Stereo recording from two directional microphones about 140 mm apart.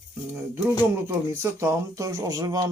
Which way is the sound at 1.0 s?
20° right (ahead or behind).